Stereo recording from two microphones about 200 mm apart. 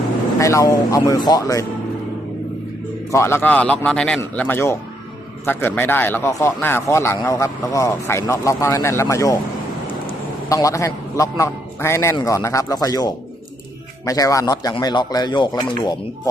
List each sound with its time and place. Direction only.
0.3 s speech: 15° left (ahead or behind)
3.1 s speech: 15° left (ahead or behind)
10.5 s speech: 15° left (ahead or behind)